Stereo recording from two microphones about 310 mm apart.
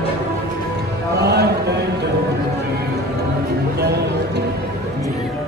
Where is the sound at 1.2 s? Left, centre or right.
Right.